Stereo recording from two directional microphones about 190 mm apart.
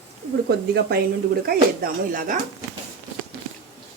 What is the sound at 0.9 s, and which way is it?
A woman's voice, 55° right (ahead or behind).